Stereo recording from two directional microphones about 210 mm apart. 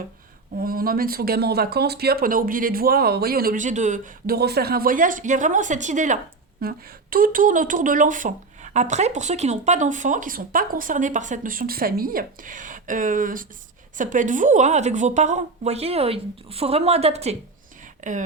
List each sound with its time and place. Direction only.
0.6 s speech: 45° right (ahead or behind)